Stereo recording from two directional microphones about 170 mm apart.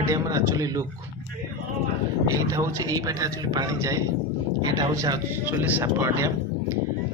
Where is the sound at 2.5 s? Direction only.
20° right (ahead or behind).